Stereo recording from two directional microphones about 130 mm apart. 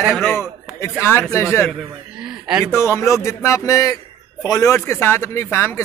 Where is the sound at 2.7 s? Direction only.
20° left (ahead or behind).